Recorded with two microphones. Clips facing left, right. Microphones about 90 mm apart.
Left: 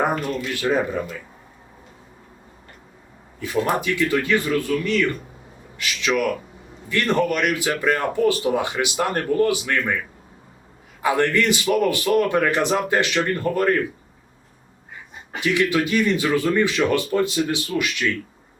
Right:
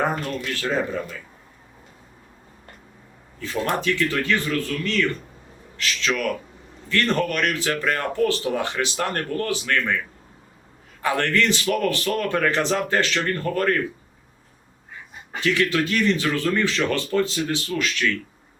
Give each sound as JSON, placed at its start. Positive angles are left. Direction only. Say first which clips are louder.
{"t": 0.5, "sound": "speech", "louder": "left 3 dB", "side_deg": 15}
{"t": 3.7, "sound": "speech", "louder": "left 1 dB", "side_deg": 15}
{"t": 11.0, "sound": "speech", "louder": "left 2 dB", "side_deg": 15}
{"t": 15.4, "sound": "speech", "louder": "left 1 dB", "side_deg": 15}